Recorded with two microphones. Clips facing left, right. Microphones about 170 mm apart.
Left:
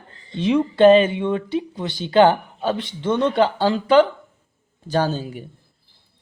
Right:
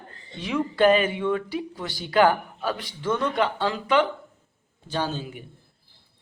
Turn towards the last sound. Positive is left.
turn(degrees=35)  # may be behind; listen again after turning